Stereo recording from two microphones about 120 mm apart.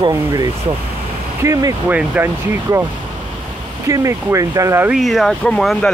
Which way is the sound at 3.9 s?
25° right (ahead or behind).